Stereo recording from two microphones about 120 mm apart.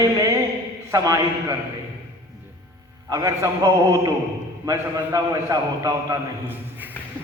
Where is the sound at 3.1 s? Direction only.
25° right (ahead or behind).